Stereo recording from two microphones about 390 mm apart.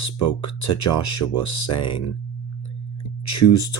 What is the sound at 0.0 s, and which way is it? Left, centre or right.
Speech, left.